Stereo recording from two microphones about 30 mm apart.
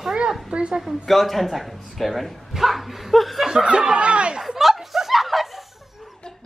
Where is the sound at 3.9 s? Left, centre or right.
Right.